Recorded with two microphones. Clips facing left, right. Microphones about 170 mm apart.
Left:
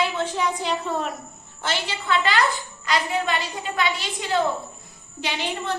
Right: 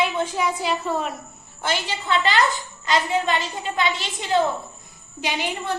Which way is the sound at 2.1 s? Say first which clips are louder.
Right 1 dB; 20° right (ahead or behind).